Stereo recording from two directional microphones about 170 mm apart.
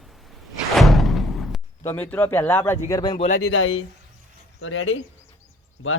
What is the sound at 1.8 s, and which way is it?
A man's voice, 10° left (ahead or behind).